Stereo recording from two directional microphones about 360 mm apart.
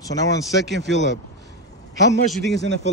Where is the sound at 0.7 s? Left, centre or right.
Right.